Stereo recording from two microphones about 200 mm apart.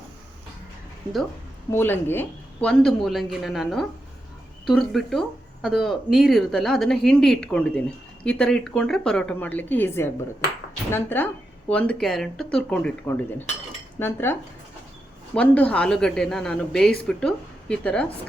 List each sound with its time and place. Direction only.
1.7 s speech: 10° left (ahead or behind)
10.9 s cutlery: 10° left (ahead or behind)
11.7 s speech: 5° left (ahead or behind)
14.0 s cutlery: 10° left (ahead or behind)
15.4 s speech: 5° left (ahead or behind)